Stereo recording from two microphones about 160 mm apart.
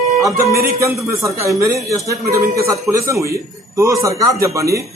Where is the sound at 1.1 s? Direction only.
20° right (ahead or behind).